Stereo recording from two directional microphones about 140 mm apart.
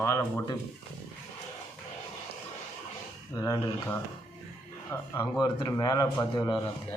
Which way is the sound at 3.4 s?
30° left (ahead or behind).